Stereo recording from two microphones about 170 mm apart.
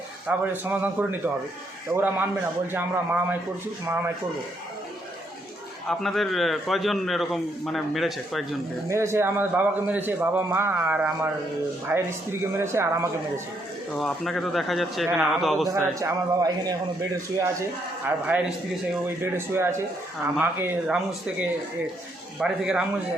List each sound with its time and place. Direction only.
0.3 s a man's voice: 10° right (ahead or behind)
5.9 s a man's voice: centre (ahead or behind)
8.9 s a man's voice: 15° right (ahead or behind)
13.9 s a man's voice: centre (ahead or behind)
15.6 s a man's voice: 20° right (ahead or behind)
19.2 s a man's voice: 15° right (ahead or behind)
22.4 s a man's voice: 5° right (ahead or behind)